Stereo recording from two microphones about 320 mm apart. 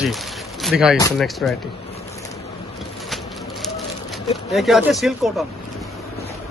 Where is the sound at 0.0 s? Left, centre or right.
Centre.